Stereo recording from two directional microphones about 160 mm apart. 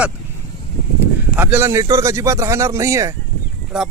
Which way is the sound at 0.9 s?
10° right (ahead or behind).